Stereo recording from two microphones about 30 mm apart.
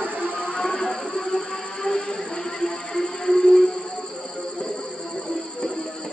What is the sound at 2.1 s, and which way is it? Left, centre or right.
Music, centre.